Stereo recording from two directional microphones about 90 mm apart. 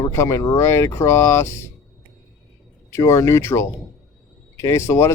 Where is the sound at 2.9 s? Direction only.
35° left (ahead or behind).